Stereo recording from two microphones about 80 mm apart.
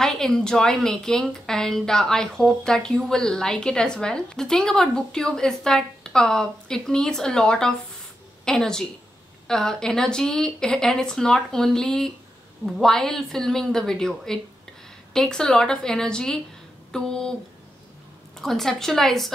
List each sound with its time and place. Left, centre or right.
0.0 s a woman's voice: centre
18.4 s a woman's voice: centre